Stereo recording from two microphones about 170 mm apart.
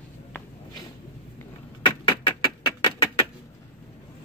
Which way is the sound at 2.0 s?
30° left (ahead or behind).